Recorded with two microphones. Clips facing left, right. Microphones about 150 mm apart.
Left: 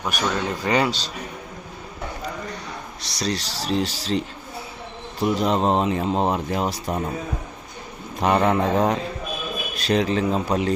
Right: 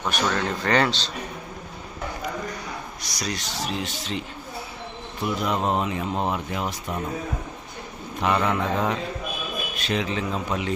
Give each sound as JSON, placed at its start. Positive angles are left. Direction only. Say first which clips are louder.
{"t": 0.0, "sound": "speech", "louder": "even", "side_deg": 10}
{"t": 3.0, "sound": "speech", "louder": "left 7 dB", "side_deg": 30}
{"t": 5.2, "sound": "speech", "louder": "left 5 dB", "side_deg": 30}
{"t": 8.2, "sound": "speech", "louder": "left 4 dB", "side_deg": 40}